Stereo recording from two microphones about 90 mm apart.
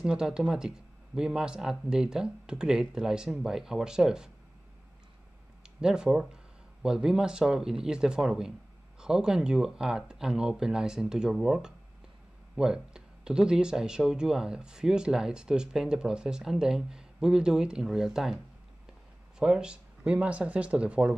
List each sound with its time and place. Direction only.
0.0 s speech: 10° right (ahead or behind)
5.8 s speech: 10° right (ahead or behind)
19.4 s speech: 10° right (ahead or behind)